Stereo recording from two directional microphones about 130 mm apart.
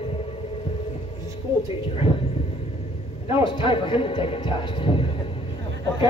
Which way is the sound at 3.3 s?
40° left (ahead or behind).